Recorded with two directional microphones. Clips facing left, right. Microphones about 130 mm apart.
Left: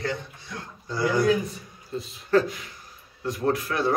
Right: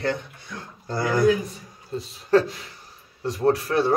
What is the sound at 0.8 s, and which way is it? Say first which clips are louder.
Speech: even; 50° right (ahead or behind).